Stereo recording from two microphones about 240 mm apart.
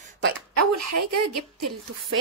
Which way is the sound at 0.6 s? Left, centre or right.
Right.